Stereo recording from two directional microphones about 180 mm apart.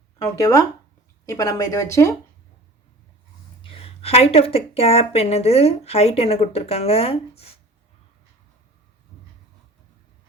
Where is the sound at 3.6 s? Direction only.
30° left (ahead or behind).